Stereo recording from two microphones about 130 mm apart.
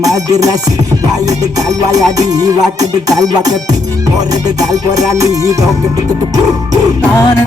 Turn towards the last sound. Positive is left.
turn(degrees=-25)  # may be behind; listen again after turning